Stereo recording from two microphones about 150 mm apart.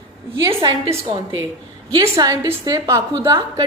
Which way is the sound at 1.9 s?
25° right (ahead or behind).